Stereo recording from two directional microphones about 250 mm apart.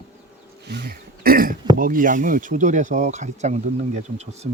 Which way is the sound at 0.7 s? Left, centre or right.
Right.